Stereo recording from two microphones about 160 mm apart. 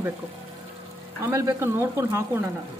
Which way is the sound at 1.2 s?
20° right (ahead or behind).